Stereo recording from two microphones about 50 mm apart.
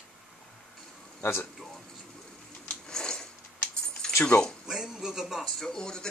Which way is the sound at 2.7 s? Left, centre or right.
Centre.